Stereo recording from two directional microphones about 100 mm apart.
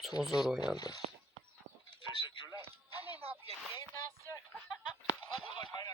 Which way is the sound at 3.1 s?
85° right.